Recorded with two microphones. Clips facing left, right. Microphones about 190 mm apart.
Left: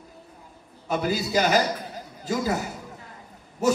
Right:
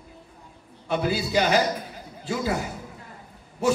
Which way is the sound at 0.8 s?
40° left (ahead or behind).